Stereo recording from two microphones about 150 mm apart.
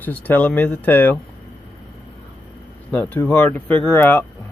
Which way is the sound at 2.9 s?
10° left (ahead or behind).